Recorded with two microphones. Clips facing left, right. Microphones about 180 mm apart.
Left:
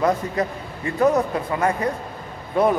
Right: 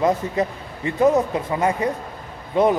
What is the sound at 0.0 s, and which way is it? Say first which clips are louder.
Speech: right 1 dB; 20° right (ahead or behind).